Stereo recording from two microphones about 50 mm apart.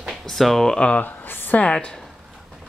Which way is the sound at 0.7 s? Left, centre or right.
Left.